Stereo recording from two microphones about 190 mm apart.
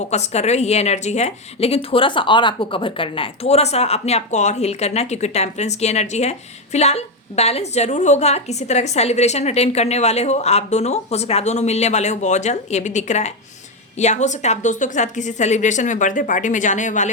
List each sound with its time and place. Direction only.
0.1 s a woman's voice: 35° left (ahead or behind)